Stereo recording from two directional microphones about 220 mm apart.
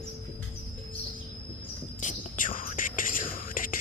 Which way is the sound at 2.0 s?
35° left (ahead or behind).